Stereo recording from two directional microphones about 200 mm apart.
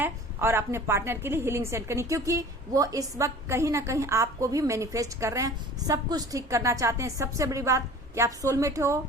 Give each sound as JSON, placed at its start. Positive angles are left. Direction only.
{"t": 0.0, "sound": "a woman's voice", "side_deg": -10}